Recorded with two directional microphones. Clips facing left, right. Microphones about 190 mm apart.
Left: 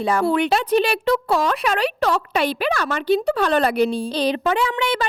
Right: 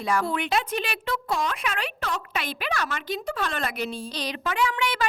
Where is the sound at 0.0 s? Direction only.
30° left (ahead or behind).